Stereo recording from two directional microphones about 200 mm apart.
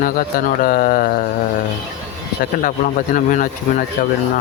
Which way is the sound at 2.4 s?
45° left (ahead or behind).